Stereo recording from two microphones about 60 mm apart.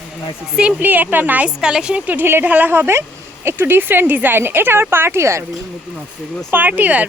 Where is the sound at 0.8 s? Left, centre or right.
Right.